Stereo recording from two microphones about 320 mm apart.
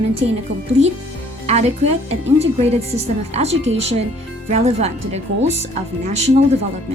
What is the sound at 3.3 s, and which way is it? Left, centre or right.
Speech, centre.